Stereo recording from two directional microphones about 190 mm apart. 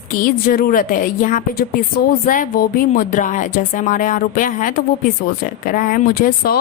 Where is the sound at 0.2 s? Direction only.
50° left (ahead or behind).